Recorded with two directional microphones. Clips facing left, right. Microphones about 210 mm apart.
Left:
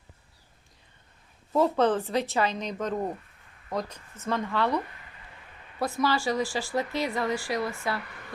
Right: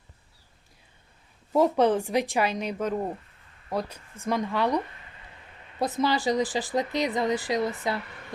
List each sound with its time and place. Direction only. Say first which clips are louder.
1.5 s a woman's voice: right 2 dB; 10° right (ahead or behind)
5.8 s speech: right 2 dB; 20° right (ahead or behind)